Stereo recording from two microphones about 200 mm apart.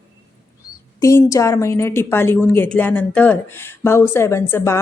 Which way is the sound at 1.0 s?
15° left (ahead or behind).